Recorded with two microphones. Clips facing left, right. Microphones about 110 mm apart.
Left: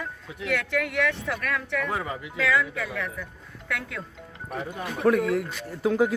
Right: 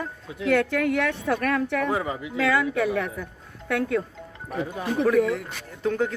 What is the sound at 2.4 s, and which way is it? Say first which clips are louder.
Speech: right 3 dB; 60° right (ahead or behind).